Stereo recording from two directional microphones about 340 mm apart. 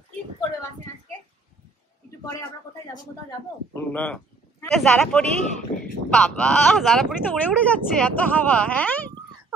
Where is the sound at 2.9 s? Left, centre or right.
Centre.